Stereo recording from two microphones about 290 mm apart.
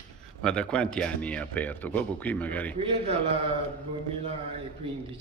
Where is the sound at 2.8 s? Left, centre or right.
Centre.